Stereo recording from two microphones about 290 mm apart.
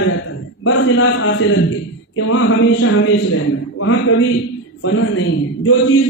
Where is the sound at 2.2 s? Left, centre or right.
Left.